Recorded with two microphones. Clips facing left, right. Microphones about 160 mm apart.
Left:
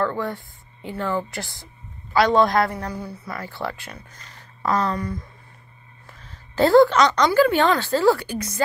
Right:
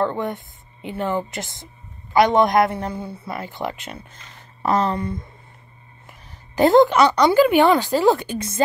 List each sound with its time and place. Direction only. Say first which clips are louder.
0.0 s speech: right 2 dB; 20° right (ahead or behind)
6.0 s a sound: even; 15° right (ahead or behind)
7.2 s speech: right 3 dB; 15° right (ahead or behind)